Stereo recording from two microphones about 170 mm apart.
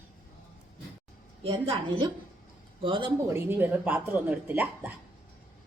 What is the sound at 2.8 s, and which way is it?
Speech, 30° right (ahead or behind).